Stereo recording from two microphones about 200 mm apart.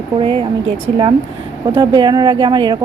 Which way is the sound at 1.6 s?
25° right (ahead or behind).